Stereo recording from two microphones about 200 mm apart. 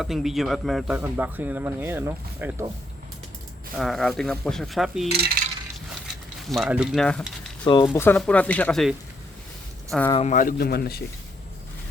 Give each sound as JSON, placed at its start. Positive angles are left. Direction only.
{"t": 0.0, "sound": "speech", "side_deg": 0}
{"t": 3.8, "sound": "speech", "side_deg": 0}
{"t": 5.4, "sound": "coin", "side_deg": -45}
{"t": 6.5, "sound": "speech", "side_deg": 0}
{"t": 7.6, "sound": "speech", "side_deg": 20}
{"t": 7.9, "sound": "speech", "side_deg": 10}
{"t": 10.1, "sound": "speech", "side_deg": 30}